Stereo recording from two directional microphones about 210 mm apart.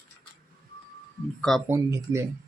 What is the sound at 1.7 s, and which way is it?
Speech, 15° right (ahead or behind).